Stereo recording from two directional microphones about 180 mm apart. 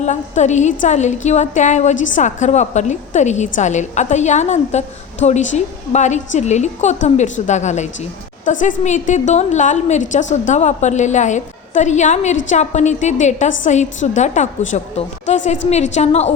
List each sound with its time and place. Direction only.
0.0 s a woman's voice: 40° left (ahead or behind)